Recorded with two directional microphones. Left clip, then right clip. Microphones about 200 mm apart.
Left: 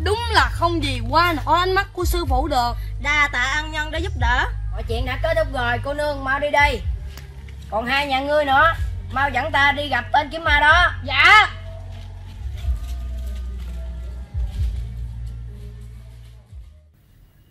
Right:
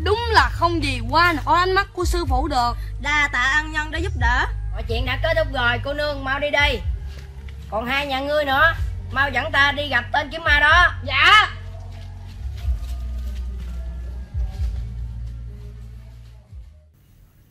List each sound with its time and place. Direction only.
0.0 s a woman's voice: 15° left (ahead or behind); by 10.9 s 5° right (ahead or behind)
11.1 s speech: 15° right (ahead or behind)